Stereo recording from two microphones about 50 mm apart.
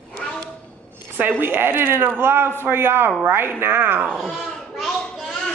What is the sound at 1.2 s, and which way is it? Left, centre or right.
Speech, right.